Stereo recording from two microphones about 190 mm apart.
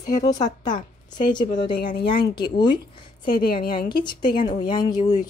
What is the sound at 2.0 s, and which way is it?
Speech, 25° left (ahead or behind).